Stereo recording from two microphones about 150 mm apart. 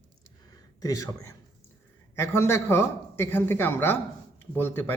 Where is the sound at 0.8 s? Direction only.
20° left (ahead or behind).